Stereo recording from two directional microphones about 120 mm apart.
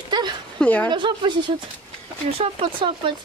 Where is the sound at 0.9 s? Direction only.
40° right (ahead or behind).